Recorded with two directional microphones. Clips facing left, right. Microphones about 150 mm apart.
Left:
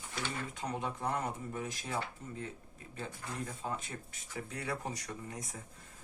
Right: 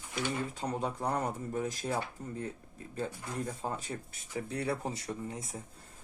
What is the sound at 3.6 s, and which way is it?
Speech, 35° right (ahead or behind).